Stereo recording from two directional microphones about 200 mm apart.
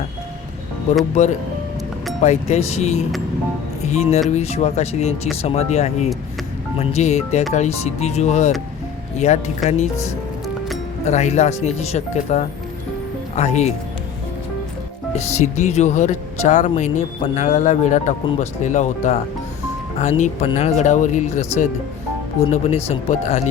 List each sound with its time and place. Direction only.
1.1 s speech: 35° left (ahead or behind)
11.0 s speech: 35° left (ahead or behind)
15.1 s speech: 35° left (ahead or behind)